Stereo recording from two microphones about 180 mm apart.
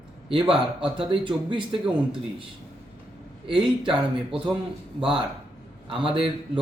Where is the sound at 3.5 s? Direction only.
30° right (ahead or behind).